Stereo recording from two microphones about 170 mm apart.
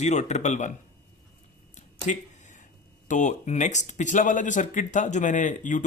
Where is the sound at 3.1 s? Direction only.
45° left (ahead or behind).